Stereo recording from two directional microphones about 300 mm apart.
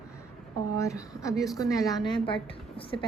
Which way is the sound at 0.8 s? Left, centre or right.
Centre.